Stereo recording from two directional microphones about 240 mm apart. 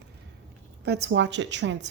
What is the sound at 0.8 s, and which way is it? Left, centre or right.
Speech, right.